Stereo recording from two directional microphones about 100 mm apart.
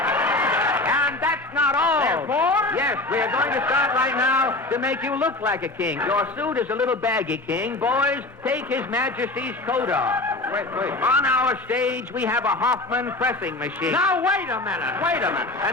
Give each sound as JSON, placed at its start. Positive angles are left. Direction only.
{"t": 0.0, "sound": "a man's voice", "side_deg": -20}